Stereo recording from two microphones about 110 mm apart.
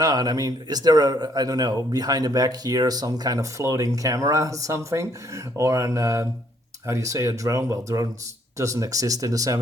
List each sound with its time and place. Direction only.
0.0 s a man's voice: 35° right (ahead or behind)